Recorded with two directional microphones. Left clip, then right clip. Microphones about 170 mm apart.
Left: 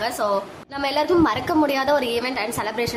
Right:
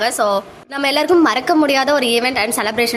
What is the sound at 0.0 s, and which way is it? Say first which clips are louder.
A woman's voice: right 6 dB; 25° right (ahead or behind).